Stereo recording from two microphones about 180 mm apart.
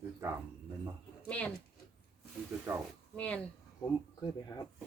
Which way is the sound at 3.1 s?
5° left (ahead or behind).